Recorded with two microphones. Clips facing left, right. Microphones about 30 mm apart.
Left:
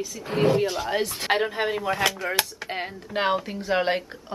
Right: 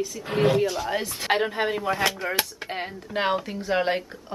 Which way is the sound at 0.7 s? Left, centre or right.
Centre.